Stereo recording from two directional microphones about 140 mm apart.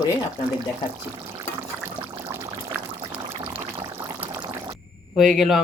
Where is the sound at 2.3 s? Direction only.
15° right (ahead or behind).